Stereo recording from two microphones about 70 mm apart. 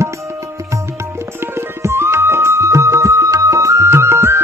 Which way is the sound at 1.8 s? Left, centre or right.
Right.